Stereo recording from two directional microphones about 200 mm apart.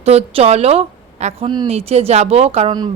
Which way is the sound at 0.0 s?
30° right (ahead or behind).